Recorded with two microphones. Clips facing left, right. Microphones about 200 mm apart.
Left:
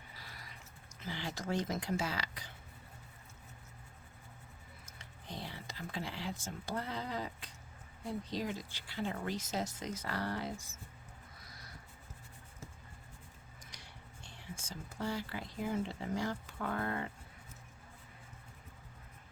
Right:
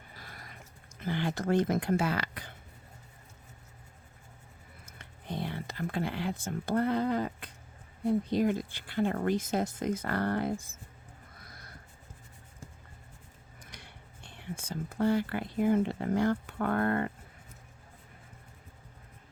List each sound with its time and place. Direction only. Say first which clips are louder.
0.1 s a sound: right 5 dB; 50° right (ahead or behind)
0.9 s speech: right 9 dB; 55° right (ahead or behind)
4.9 s speech: right 8 dB; 60° right (ahead or behind)
13.7 s speech: right 4 dB; 60° right (ahead or behind)